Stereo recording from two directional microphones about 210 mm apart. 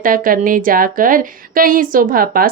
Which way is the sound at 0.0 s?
40° right (ahead or behind).